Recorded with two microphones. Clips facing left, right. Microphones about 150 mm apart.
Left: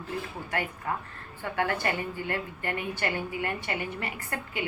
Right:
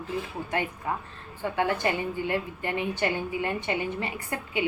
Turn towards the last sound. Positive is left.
turn(degrees=-20)  # may be behind; listen again after turning